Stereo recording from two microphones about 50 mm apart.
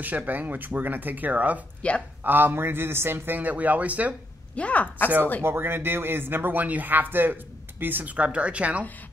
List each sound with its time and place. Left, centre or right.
0.0 s speech: right
1.8 s speech: left
2.2 s speech: right
4.6 s speech: left
5.4 s speech: right